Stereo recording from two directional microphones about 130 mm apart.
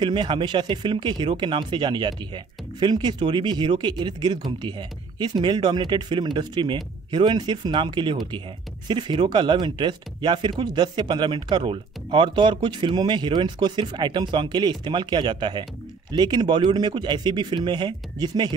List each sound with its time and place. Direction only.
0.0 s speech: 35° right (ahead or behind)